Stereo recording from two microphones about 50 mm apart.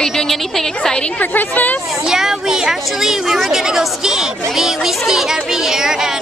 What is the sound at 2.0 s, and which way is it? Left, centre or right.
A woman's voice, centre.